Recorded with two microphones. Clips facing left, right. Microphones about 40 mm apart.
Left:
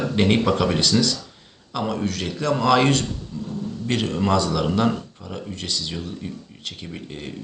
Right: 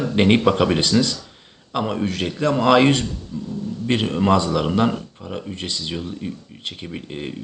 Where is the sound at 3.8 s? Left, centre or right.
Right.